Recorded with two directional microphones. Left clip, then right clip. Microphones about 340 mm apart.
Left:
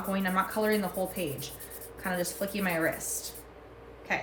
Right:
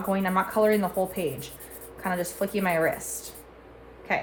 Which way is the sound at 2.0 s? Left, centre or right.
Right.